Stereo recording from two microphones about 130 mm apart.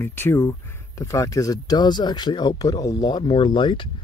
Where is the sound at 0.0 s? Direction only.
20° left (ahead or behind).